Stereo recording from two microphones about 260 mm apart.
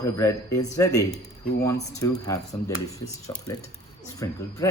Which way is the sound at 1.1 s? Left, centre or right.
Left.